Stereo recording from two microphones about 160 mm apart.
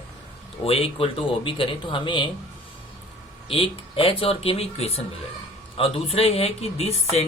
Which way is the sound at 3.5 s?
35° left (ahead or behind).